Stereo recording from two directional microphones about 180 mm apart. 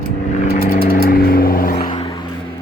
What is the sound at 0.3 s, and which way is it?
Vehicle, 45° left (ahead or behind).